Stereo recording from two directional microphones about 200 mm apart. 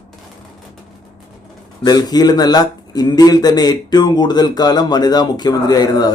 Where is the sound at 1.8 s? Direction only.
20° left (ahead or behind).